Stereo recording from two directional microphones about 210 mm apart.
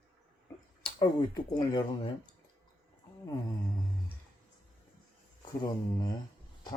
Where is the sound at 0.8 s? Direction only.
20° left (ahead or behind).